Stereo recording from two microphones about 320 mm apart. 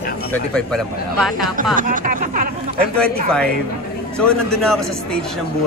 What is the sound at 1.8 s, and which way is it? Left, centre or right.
Speech, right.